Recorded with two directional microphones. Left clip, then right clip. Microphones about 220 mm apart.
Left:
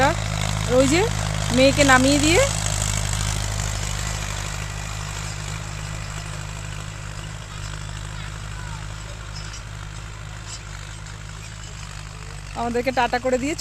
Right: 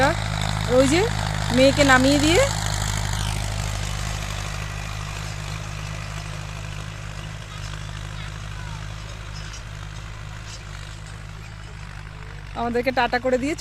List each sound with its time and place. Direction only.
0.1 s vehicle: 20° left (ahead or behind)
0.8 s speech: 5° right (ahead or behind)
1.0 s a sound: 20° left (ahead or behind)
1.8 s speech: 5° right (ahead or behind)
2.0 s speech: 25° left (ahead or behind)
2.5 s vehicle: 25° left (ahead or behind); by 6.4 s centre (ahead or behind)
12.5 s speech: 5° right (ahead or behind)